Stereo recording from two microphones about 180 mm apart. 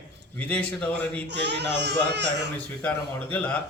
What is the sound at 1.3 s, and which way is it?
Speech, 70° right (ahead or behind).